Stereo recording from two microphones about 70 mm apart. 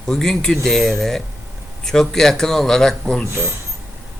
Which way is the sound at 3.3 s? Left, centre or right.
Right.